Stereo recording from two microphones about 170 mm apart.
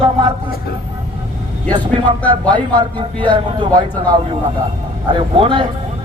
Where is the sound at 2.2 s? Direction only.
10° left (ahead or behind).